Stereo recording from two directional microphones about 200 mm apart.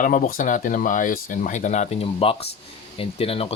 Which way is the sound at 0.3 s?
40° left (ahead or behind).